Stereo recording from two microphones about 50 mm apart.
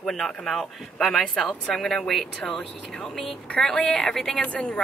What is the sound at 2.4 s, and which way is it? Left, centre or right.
Speech, centre.